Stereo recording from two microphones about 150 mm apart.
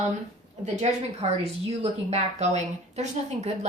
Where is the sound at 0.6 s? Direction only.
50° right (ahead or behind).